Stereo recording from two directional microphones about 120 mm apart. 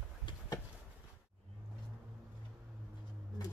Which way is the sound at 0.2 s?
40° left (ahead or behind).